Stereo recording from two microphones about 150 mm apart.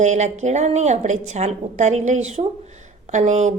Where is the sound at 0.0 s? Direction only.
50° right (ahead or behind).